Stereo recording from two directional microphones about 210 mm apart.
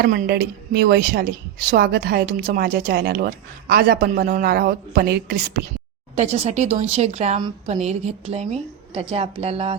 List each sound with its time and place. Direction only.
0.0 s a woman's voice: 45° right (ahead or behind)
6.1 s speech: 30° right (ahead or behind)